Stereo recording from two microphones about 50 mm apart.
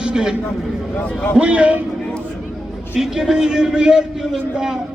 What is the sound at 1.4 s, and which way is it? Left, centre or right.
Speech, right.